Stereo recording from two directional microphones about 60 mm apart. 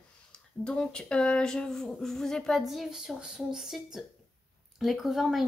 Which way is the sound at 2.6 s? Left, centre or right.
Centre.